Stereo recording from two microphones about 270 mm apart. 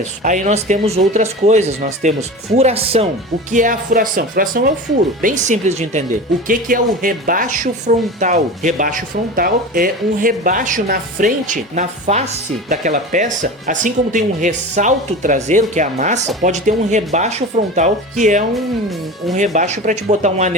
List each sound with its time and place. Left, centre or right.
0.0 s a woman's voice: right